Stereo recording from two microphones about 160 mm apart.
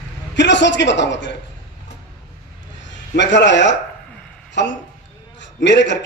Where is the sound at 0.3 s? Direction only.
90° left.